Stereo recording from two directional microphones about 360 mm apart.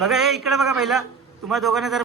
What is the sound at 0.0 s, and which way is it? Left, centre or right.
Speech, centre.